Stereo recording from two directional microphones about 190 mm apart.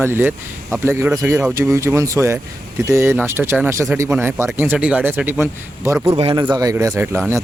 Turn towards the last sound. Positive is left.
turn(degrees=-10)  # may be behind; listen again after turning